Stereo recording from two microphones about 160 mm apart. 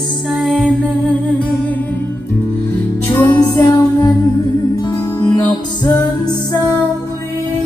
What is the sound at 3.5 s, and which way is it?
Music, 25° left (ahead or behind).